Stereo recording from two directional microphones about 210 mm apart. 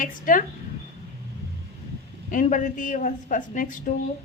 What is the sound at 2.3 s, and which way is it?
A woman's voice, 35° left (ahead or behind).